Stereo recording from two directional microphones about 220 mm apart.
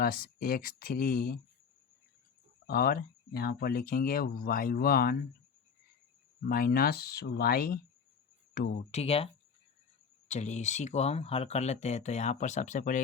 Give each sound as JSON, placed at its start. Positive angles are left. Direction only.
{"t": 0.0, "sound": "speech", "side_deg": 40}
{"t": 2.6, "sound": "speech", "side_deg": 40}
{"t": 6.4, "sound": "speech", "side_deg": 45}
{"t": 8.9, "sound": "speech", "side_deg": 30}